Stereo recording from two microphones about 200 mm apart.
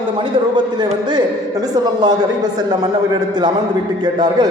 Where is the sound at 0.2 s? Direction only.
20° right (ahead or behind).